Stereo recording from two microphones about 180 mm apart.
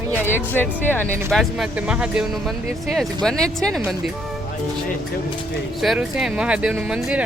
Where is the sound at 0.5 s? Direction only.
10° left (ahead or behind).